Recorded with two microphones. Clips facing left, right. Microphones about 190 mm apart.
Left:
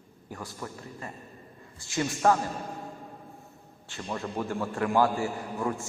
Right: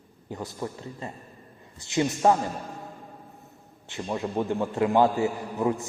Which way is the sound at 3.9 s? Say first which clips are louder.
Right 4 dB; 15° right (ahead or behind).